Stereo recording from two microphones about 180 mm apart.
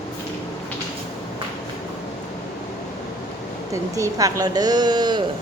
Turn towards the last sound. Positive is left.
turn(degrees=-25)  # may be behind; listen again after turning